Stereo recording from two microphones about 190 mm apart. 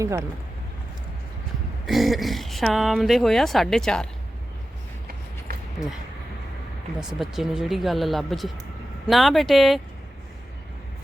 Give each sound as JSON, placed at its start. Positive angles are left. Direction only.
{"t": 0.0, "sound": "speech", "side_deg": -15}
{"t": 1.9, "sound": "speech", "side_deg": 0}
{"t": 7.0, "sound": "speech", "side_deg": -5}